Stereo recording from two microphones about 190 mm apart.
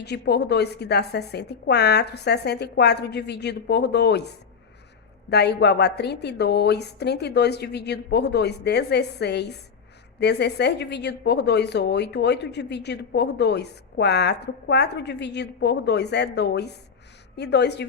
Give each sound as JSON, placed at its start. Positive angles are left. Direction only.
{"t": 0.0, "sound": "a woman's voice", "side_deg": 60}
{"t": 5.3, "sound": "a woman's voice", "side_deg": 60}